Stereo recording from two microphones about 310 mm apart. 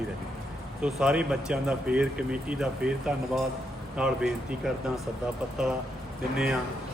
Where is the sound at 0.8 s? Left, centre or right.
Centre.